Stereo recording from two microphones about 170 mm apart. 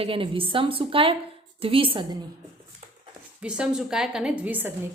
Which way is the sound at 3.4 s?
5° right (ahead or behind).